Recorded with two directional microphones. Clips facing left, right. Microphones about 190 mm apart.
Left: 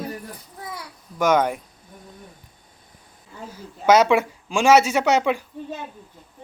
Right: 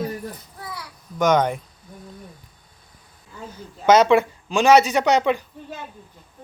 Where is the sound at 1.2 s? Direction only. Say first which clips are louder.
Right 1 dB; 5° left (ahead or behind).